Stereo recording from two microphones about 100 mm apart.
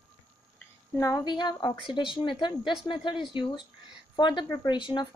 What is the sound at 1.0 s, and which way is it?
Speech, 35° left (ahead or behind).